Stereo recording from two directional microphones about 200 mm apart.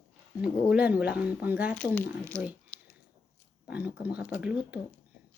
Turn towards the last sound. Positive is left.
turn(degrees=-5)  # may be behind; listen again after turning